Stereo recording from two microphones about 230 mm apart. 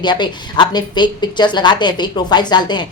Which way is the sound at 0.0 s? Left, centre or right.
Centre.